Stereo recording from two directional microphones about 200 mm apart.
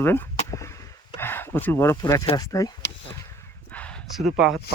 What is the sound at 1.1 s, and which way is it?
Speech, 10° left (ahead or behind).